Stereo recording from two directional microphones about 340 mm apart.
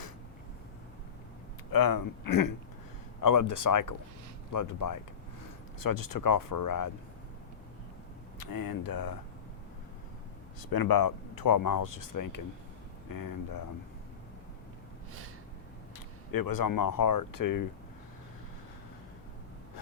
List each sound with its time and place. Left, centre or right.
1.7 s speech: left
5.8 s speech: left
8.4 s speech: left
10.6 s speech: left
16.3 s speech: left